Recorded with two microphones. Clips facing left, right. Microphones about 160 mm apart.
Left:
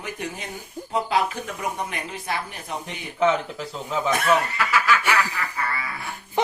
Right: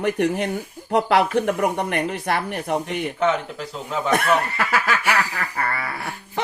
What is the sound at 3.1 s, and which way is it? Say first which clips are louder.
Speech: left 2 dB; centre (ahead or behind).